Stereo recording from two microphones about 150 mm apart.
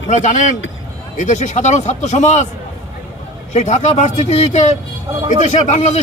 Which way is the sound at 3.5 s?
50° left (ahead or behind).